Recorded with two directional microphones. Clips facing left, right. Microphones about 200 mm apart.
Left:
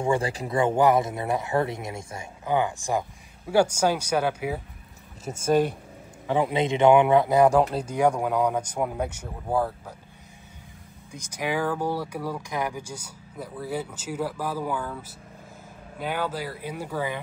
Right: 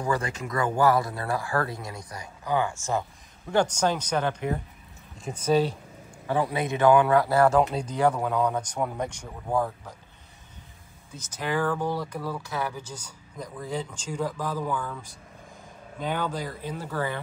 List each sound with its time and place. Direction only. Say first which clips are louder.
0.0 s speech: left 3 dB; 30° left (ahead or behind)
7.5 s speech: left 1 dB; 5° left (ahead or behind)
11.1 s speech: left 2 dB; 10° left (ahead or behind)